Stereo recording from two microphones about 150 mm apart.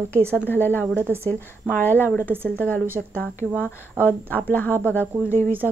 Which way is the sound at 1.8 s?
15° left (ahead or behind).